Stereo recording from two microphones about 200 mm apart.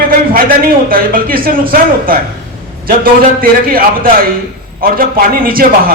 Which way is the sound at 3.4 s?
45° right (ahead or behind).